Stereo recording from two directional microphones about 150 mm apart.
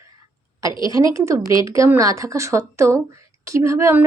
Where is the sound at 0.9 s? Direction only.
20° right (ahead or behind).